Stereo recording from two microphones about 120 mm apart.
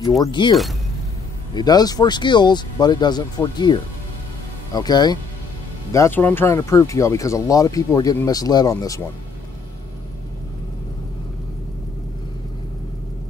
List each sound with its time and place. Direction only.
0.3 s speech: 40° left (ahead or behind)
5.9 s speech: 20° left (ahead or behind)